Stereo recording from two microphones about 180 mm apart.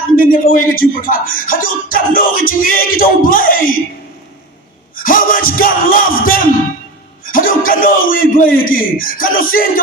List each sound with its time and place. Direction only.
0.2 s speech: 50° left (ahead or behind)
4.9 s speech: 50° left (ahead or behind)